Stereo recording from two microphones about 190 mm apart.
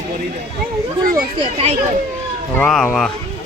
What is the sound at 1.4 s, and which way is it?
Speech, 30° right (ahead or behind).